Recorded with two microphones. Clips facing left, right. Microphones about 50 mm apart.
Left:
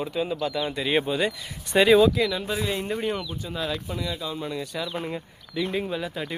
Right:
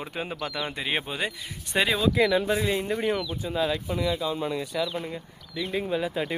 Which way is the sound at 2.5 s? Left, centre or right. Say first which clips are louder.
Right 2 dB; centre.